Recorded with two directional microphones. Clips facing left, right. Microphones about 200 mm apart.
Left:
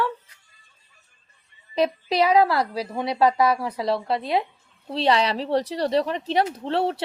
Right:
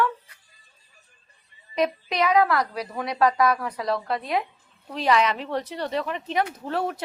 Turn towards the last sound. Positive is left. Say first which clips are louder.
# left 4 dB
turn(degrees=30)  # may be behind; listen again after turning